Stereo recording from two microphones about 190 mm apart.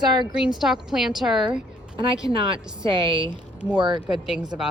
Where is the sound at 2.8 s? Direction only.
25° right (ahead or behind).